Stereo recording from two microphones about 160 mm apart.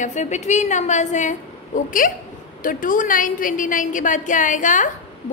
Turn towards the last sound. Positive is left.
turn(degrees=50)  # may be behind; listen again after turning